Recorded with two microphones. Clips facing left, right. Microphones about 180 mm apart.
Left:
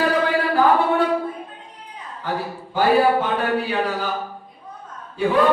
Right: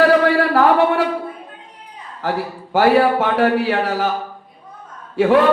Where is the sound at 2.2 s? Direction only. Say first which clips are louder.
Right 4 dB; 80° right.